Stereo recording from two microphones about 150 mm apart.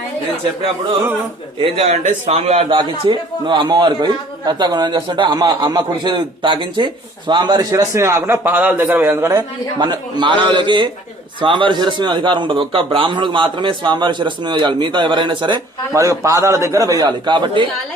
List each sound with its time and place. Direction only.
1.6 s a man's voice: 40° right (ahead or behind); by 9.4 s 15° right (ahead or behind)
9.8 s speech: 30° right (ahead or behind)